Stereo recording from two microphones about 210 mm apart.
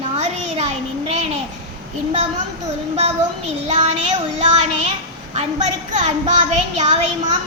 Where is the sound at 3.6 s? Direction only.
35° right (ahead or behind).